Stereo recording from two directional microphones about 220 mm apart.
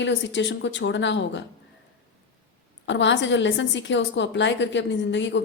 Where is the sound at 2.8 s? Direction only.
55° left (ahead or behind).